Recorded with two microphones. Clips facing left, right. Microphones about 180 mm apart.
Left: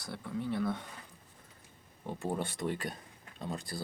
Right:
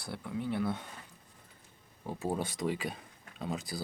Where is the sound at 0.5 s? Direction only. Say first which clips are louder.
Even; 10° right (ahead or behind).